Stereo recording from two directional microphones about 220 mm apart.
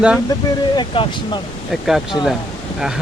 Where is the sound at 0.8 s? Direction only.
20° left (ahead or behind).